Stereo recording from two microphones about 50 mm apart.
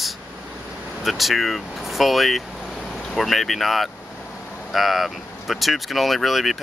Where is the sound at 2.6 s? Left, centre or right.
Centre.